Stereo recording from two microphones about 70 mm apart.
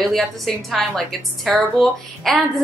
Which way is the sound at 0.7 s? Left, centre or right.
Centre.